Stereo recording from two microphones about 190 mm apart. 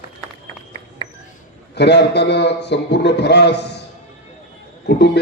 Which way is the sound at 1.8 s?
60° left (ahead or behind).